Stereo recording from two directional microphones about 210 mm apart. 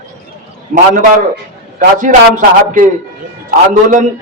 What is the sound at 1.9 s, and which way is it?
A man's voice, 40° right (ahead or behind).